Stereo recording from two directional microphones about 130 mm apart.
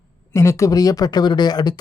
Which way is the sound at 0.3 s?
20° left (ahead or behind).